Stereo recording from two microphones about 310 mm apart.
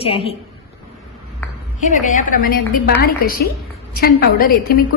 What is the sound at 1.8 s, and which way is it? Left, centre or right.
A woman's voice, left.